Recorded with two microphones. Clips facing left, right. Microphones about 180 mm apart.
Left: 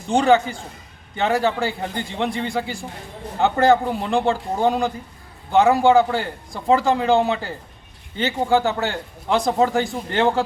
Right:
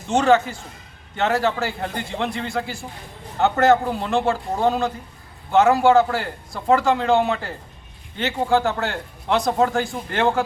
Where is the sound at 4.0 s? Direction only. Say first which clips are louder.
Left 1 dB; 15° left (ahead or behind).